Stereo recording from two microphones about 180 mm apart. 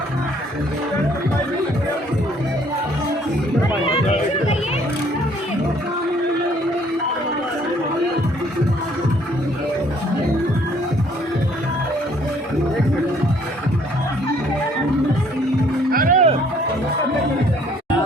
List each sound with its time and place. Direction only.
15.9 s music: 50° right (ahead or behind)